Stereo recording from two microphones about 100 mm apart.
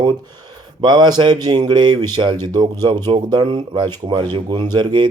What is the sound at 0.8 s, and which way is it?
Speech, 45° right (ahead or behind).